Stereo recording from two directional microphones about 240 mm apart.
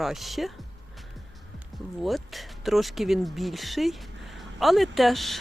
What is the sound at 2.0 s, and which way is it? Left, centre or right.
Speech, centre.